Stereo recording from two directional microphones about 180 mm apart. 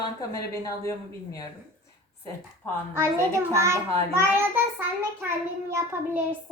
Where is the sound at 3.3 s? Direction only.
15° right (ahead or behind).